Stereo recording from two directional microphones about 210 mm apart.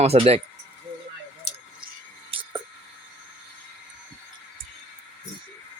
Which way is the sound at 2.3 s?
25° right (ahead or behind).